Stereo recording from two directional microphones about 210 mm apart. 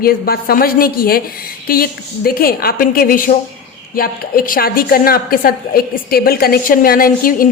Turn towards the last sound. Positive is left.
turn(degrees=45)  # may be behind; listen again after turning